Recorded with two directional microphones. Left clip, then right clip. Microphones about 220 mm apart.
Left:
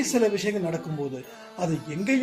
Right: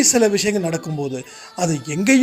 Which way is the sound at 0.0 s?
50° right (ahead or behind).